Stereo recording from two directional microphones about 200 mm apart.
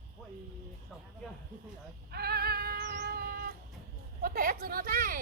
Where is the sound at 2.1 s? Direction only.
50° right (ahead or behind).